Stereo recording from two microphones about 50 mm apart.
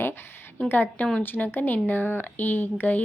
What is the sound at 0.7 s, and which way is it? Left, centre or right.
Speech, left.